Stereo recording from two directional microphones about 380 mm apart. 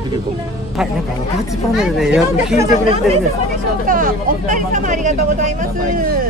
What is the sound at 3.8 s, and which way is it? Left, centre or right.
Speech, right.